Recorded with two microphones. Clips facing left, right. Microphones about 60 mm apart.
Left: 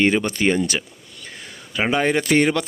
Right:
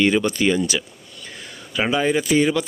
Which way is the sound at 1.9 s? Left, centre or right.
Left.